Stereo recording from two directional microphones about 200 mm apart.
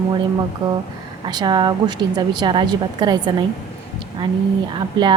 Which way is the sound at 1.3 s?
20° right (ahead or behind).